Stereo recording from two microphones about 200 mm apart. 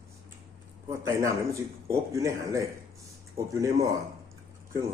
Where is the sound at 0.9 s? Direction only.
15° right (ahead or behind).